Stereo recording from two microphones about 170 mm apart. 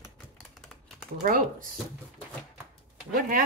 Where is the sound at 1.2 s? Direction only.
55° right (ahead or behind).